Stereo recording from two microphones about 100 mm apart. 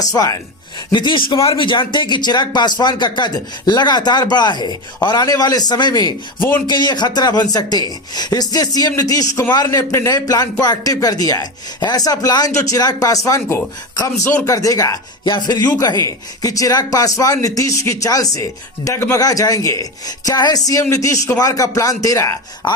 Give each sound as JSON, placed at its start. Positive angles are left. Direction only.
{"t": 0.0, "sound": "a man's voice", "side_deg": 35}
{"t": 0.9, "sound": "a man's voice", "side_deg": 50}
{"t": 14.4, "sound": "a man's voice", "side_deg": 35}
{"t": 15.2, "sound": "a man's voice", "side_deg": 45}